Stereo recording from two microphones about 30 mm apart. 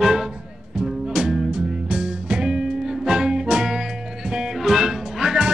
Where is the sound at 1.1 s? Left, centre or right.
Right.